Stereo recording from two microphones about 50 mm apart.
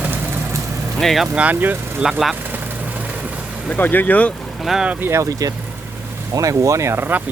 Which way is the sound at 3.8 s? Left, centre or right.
Left.